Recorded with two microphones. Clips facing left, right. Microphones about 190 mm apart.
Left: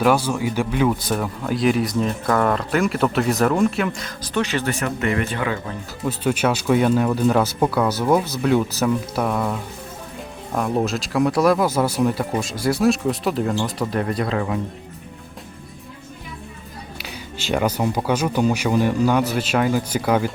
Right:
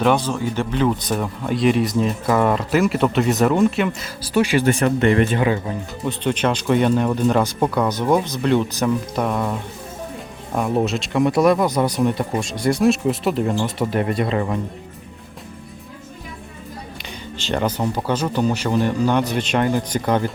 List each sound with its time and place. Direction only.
0.0 s speech: 5° left (ahead or behind); by 4.7 s 10° right (ahead or behind)
4.7 s speech: 30° right (ahead or behind)
6.1 s speech: 5° left (ahead or behind)
17.0 s speech: 5° left (ahead or behind)